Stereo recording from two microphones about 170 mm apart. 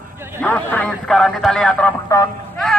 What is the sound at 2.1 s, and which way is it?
Speech, 20° left (ahead or behind).